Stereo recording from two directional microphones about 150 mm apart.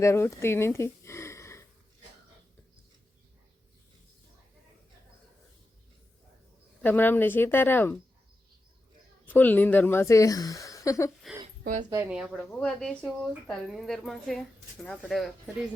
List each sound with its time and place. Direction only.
0.0 s speech: 20° left (ahead or behind)
6.8 s speech: 10° left (ahead or behind)
9.3 s speech: 10° left (ahead or behind)
11.6 s speech: 55° right (ahead or behind)
12.0 s speech: 5° right (ahead or behind)
12.3 s speech: 10° left (ahead or behind)